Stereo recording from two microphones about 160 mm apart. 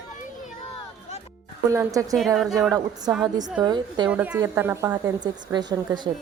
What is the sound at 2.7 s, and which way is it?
A woman's voice, 25° right (ahead or behind).